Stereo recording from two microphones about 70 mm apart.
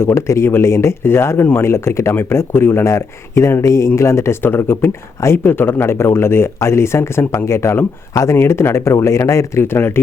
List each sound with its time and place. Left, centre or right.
0.0 s speech: left